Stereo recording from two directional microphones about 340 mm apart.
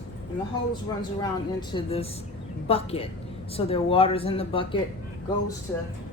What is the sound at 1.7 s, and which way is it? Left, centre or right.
A woman's voice, centre.